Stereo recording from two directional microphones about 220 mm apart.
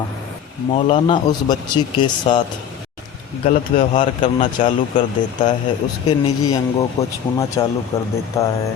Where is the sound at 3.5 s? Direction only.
35° left (ahead or behind).